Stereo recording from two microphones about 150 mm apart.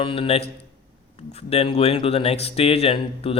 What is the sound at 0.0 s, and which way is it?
Speech, 35° left (ahead or behind).